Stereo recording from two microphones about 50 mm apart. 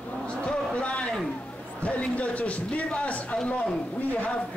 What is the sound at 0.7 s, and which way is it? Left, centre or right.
Speech, left.